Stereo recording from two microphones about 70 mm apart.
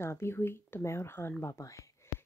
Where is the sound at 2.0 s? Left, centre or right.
Left.